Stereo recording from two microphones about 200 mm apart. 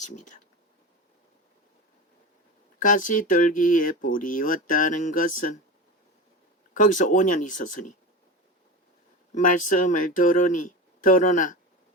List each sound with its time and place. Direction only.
2.7 s speech: 40° left (ahead or behind)
6.7 s speech: 40° left (ahead or behind)
9.3 s speech: 40° left (ahead or behind)